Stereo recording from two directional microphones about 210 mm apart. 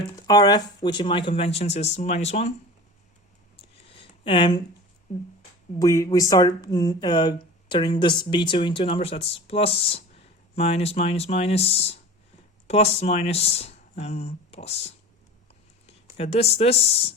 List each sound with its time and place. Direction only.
0.2 s speech: 20° left (ahead or behind)
3.9 s a sound: 25° left (ahead or behind)
5.1 s speech: 30° left (ahead or behind)
5.8 s speech: 15° left (ahead or behind)